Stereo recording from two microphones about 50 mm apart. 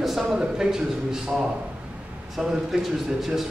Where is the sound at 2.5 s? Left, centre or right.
Centre.